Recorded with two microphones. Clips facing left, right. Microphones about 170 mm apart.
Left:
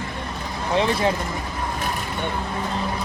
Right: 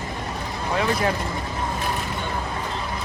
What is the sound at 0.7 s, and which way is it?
Speech, 25° left (ahead or behind).